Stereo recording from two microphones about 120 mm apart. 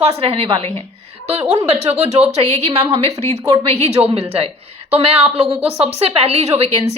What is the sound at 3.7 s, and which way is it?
A woman's voice, 60° right (ahead or behind).